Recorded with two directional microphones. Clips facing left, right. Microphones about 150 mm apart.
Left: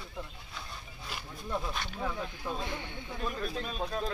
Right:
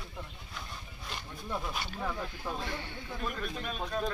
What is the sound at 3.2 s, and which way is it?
Speech, centre (ahead or behind).